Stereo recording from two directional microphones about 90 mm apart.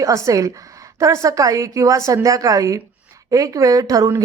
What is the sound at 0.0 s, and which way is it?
Speech, 35° right (ahead or behind).